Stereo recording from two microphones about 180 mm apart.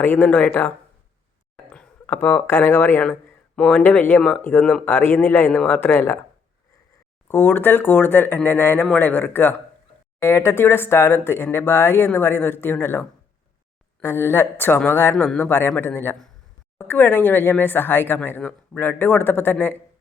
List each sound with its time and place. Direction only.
0.0 s speech: 10° left (ahead or behind)
1.7 s speech: 10° left (ahead or behind)
7.3 s speech: 10° left (ahead or behind)